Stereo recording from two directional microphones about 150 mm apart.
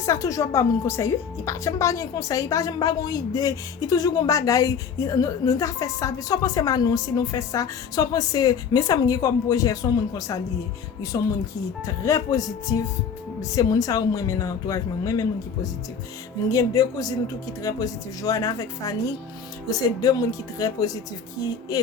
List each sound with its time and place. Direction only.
0.0 s speech: 20° left (ahead or behind)